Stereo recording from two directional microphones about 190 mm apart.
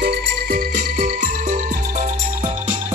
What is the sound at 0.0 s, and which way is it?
Music, 60° right (ahead or behind).